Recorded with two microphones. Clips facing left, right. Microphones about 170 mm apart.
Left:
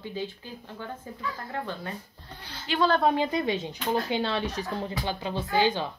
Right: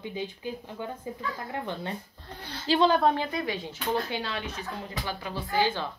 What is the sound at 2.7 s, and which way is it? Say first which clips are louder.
Speech: right 3 dB; 35° right (ahead or behind).